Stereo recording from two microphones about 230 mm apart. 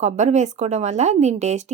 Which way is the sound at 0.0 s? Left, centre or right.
Right.